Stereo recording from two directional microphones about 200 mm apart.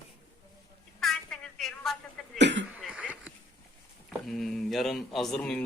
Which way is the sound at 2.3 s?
60° right (ahead or behind).